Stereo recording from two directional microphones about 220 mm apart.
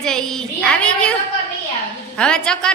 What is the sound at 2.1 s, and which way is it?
Speech, 5° left (ahead or behind).